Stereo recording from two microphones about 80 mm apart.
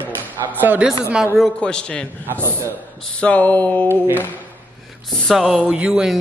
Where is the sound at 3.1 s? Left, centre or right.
Centre.